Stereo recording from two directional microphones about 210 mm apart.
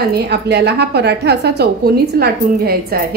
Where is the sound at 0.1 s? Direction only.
50° right (ahead or behind).